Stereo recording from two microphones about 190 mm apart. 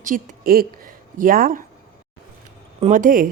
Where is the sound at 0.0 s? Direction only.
45° right (ahead or behind).